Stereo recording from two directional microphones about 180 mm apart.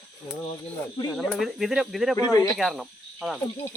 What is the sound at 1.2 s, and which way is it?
Speech, centre (ahead or behind).